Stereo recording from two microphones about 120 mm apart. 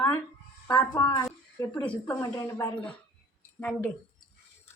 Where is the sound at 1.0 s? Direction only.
30° left (ahead or behind).